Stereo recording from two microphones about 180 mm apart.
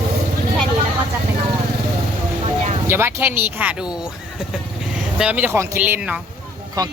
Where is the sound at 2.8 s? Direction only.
10° right (ahead or behind).